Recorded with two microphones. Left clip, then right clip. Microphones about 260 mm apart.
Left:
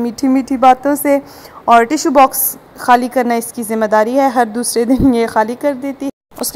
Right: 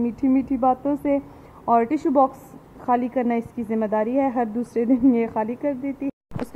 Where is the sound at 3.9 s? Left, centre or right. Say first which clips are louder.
Left 11 dB; left.